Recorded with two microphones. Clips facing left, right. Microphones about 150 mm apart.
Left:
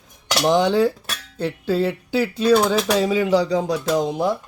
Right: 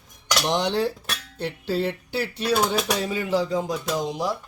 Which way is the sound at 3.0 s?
90° left.